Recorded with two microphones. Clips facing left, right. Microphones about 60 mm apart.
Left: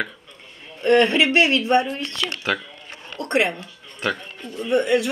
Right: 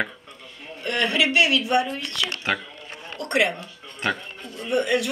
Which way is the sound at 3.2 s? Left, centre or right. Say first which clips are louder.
Left 1 dB; left.